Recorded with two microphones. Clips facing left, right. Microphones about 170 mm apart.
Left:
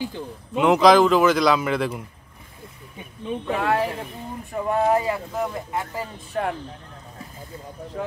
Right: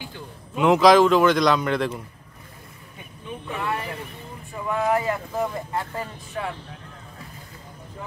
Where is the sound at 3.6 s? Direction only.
90° left.